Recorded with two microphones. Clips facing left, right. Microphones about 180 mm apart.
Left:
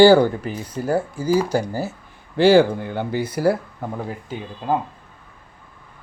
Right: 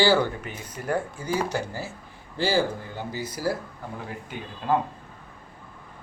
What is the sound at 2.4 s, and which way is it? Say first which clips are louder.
Speech: left 11 dB; 60° left (ahead or behind).